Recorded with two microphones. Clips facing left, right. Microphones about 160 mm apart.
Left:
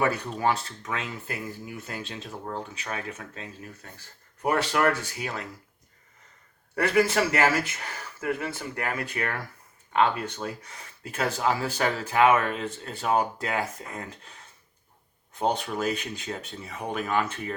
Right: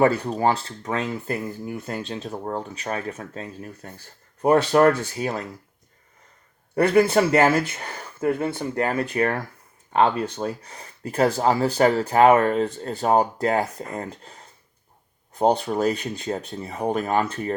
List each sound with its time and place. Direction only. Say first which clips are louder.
0.0 s speech: right 6 dB; 35° right (ahead or behind)
7.1 s speech: right 6 dB; 30° right (ahead or behind)